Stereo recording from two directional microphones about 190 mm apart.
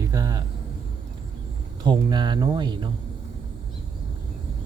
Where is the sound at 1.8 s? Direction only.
25° right (ahead or behind).